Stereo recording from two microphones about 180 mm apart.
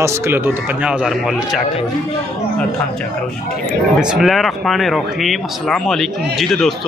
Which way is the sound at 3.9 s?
5° right (ahead or behind).